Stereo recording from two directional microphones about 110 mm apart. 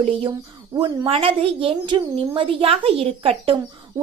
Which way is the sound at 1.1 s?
60° right (ahead or behind).